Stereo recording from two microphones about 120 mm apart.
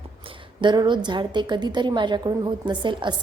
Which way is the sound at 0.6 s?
40° right (ahead or behind).